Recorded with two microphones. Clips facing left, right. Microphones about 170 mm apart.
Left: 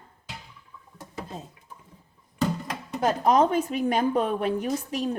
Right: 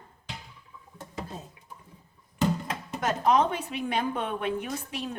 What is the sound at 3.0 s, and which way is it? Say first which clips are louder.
A woman's voice: left 3 dB; 35° left (ahead or behind).